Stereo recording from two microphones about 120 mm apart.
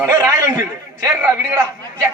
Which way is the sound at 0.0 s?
20° right (ahead or behind).